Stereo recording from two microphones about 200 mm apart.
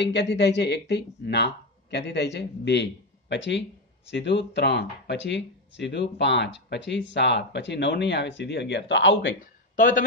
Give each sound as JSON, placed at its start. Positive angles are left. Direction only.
{"t": 0.0, "sound": "speech", "side_deg": 60}
{"t": 9.3, "sound": "speech", "side_deg": 40}